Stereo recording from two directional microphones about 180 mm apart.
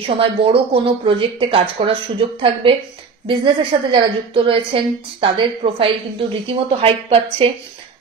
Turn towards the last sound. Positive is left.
turn(degrees=-30)  # may be behind; listen again after turning